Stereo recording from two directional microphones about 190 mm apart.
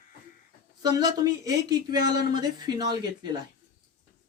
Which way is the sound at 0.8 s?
20° right (ahead or behind).